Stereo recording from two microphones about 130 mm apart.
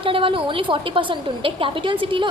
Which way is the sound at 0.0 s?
40° right (ahead or behind).